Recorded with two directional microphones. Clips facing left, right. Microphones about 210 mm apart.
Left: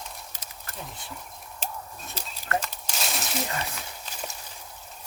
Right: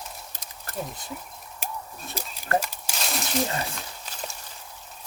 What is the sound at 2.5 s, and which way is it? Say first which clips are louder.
Crumpling: right 4 dB; 35° right (ahead or behind).